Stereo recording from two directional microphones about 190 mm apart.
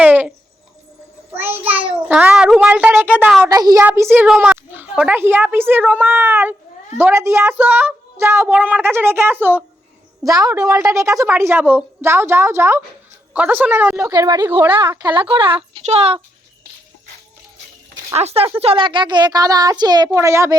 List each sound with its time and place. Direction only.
0.0 s a sound: 10° right (ahead or behind)
1.4 s child singing: 10° right (ahead or behind)
1.9 s a woman's voice: 5° right (ahead or behind)
3.5 s a child's voice: 20° right (ahead or behind)
14.1 s a woman's voice: 20° right (ahead or behind)
14.8 s a child's voice: 25° right (ahead or behind)
18.1 s a child's voice: 35° right (ahead or behind); by 20.6 s 15° right (ahead or behind)